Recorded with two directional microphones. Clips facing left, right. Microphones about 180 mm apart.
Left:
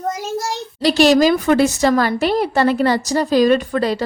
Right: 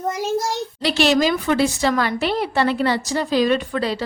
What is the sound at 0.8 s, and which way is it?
A woman's voice, 40° left (ahead or behind).